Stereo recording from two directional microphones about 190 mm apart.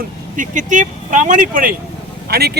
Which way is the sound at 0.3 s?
40° right (ahead or behind).